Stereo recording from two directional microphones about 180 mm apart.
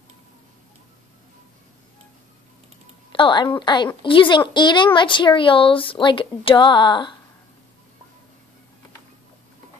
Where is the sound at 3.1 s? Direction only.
25° left (ahead or behind).